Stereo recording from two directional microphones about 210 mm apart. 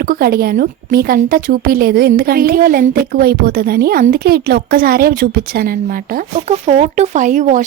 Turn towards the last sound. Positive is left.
turn(degrees=-35)  # may be behind; listen again after turning